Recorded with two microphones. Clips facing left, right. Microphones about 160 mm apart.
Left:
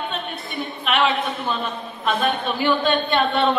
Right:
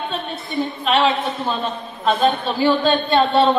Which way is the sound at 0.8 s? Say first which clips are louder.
Right 2 dB; 30° right (ahead or behind).